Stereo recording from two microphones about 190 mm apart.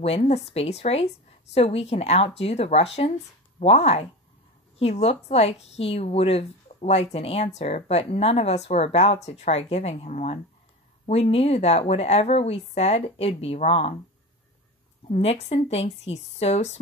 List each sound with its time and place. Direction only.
0.0 s a woman's voice: 35° left (ahead or behind)
15.0 s a woman's voice: 35° left (ahead or behind)